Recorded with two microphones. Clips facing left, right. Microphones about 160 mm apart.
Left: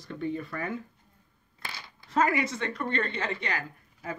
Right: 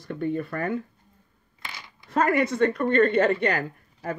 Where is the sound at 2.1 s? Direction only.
55° right (ahead or behind).